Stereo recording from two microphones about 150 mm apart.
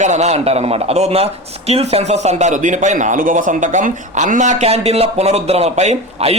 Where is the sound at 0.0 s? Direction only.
50° right (ahead or behind).